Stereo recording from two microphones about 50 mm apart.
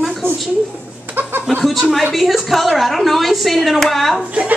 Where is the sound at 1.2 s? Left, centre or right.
Right.